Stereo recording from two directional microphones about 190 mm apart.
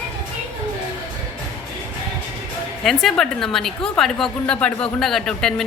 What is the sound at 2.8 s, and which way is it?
A woman's voice, centre (ahead or behind).